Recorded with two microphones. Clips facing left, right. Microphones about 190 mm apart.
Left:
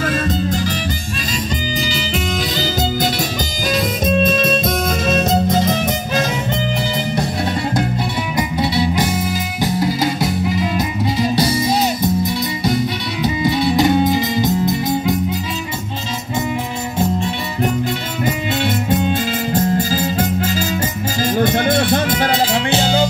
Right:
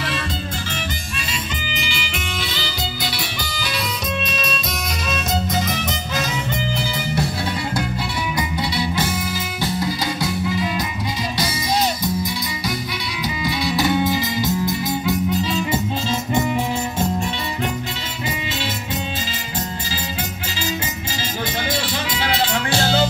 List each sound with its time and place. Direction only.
1.7 s music: 35° left (ahead or behind)
5.3 s music: 25° left (ahead or behind)
8.4 s music: 20° left (ahead or behind)
13.7 s music: 20° left (ahead or behind)
18.2 s music: 55° left (ahead or behind)
22.7 s music: 15° left (ahead or behind)